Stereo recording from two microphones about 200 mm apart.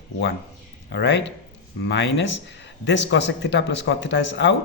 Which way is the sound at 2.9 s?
60° left (ahead or behind).